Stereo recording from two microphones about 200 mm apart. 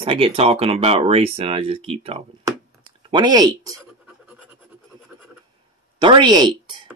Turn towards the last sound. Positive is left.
turn(degrees=-20)  # may be behind; listen again after turning